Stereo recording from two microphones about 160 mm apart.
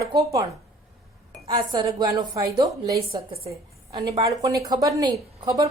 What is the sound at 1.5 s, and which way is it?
A woman's voice, 30° right (ahead or behind).